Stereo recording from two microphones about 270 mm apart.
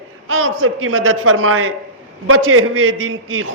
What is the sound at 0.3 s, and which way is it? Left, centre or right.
A man's voice, right.